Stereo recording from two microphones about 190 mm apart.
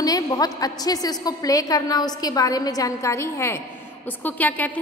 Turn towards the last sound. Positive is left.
turn(degrees=10)  # may be behind; listen again after turning